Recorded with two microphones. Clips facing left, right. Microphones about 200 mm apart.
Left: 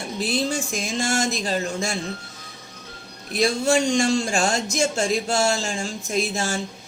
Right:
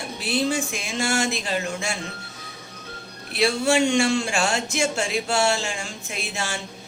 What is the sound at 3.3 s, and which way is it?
Speech, 40° left (ahead or behind).